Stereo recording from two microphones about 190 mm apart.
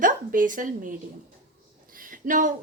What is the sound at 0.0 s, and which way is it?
A woman's voice, 45° right (ahead or behind).